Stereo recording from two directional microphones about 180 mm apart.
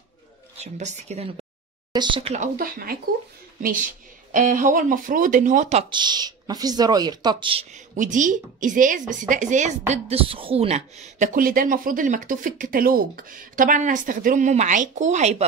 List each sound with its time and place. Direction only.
0.7 s a woman's voice: 40° right (ahead or behind)
1.9 s speech: 25° right (ahead or behind)
2.3 s speech: 45° right (ahead or behind)
5.9 s speech: 25° right (ahead or behind)
7.7 s speech: 45° right (ahead or behind)